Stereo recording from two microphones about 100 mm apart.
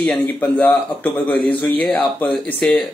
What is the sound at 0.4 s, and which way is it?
Speech, 15° left (ahead or behind).